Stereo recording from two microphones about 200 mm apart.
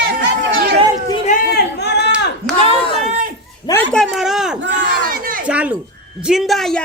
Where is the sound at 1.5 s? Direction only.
60° left (ahead or behind).